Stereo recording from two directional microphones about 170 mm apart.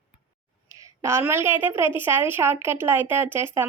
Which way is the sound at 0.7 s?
20° right (ahead or behind).